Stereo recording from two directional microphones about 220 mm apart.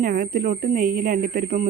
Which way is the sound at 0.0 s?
40° right (ahead or behind).